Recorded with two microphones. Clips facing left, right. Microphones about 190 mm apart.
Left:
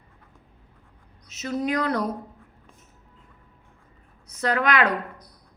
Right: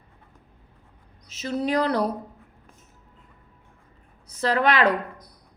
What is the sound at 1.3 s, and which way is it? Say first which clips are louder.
Speech: right 1 dB; 30° right (ahead or behind).